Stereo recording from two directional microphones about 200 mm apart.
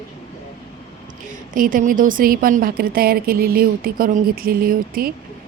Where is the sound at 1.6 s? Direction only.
45° right (ahead or behind).